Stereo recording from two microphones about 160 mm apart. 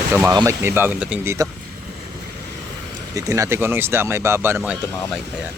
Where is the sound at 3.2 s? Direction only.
20° right (ahead or behind).